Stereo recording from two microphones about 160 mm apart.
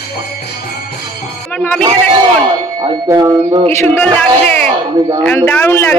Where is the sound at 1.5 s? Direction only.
10° left (ahead or behind).